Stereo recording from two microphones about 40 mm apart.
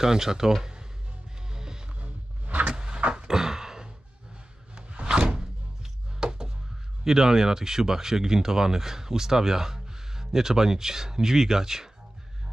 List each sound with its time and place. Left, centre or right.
0.0 s speech: centre
1.5 s music: centre
2.0 s a sound: right
2.7 s vehicle: centre
3.1 s thunk: centre
4.7 s music: right
7.1 s speech: centre